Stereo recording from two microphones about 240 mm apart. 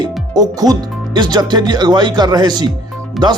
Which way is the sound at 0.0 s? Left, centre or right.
Centre.